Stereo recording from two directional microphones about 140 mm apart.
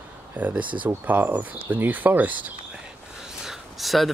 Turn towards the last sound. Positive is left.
turn(degrees=0)  # may be behind; listen again after turning